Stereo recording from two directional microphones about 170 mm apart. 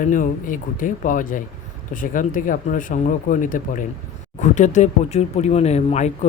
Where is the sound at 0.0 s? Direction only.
50° left (ahead or behind).